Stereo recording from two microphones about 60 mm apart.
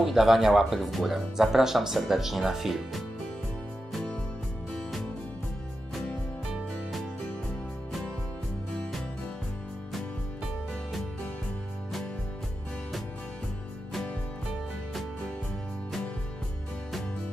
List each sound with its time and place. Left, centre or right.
0.0 s speech: centre